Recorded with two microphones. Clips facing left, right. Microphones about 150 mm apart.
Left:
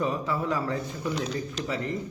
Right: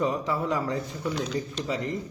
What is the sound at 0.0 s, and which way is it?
Speech, 20° right (ahead or behind).